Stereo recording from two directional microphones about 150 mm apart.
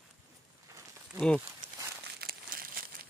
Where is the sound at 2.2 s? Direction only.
80° right.